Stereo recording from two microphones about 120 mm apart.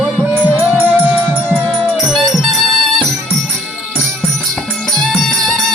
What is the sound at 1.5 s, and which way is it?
Music, 5° left (ahead or behind).